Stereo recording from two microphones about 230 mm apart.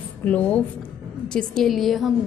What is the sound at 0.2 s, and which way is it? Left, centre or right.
A woman's voice, centre.